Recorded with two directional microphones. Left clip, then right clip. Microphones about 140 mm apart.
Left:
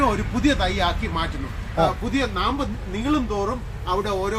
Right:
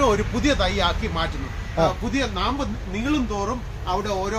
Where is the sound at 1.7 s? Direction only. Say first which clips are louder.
Even; 5° left (ahead or behind).